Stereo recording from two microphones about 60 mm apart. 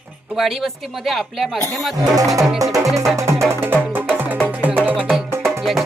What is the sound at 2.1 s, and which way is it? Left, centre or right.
Music, right.